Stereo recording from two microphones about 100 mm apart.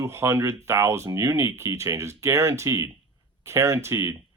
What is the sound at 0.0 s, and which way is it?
Speech, 25° right (ahead or behind).